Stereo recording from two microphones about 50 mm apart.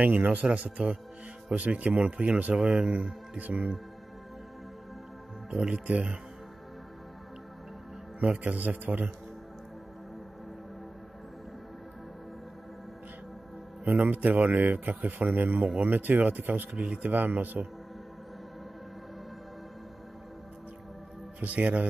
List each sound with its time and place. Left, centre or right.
0.0 s speech: right
0.8 s speech: right
2.5 s speech: centre
5.5 s speech: centre
8.2 s speech: right
13.8 s speech: right
17.1 s speech: right
21.4 s speech: right